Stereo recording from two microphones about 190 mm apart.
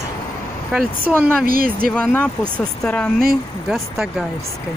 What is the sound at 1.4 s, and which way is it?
Speech, 50° right (ahead or behind).